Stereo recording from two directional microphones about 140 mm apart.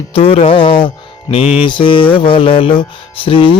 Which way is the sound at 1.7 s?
35° left (ahead or behind).